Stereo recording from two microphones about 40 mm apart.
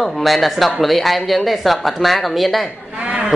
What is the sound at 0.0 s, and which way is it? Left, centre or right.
Speech, centre.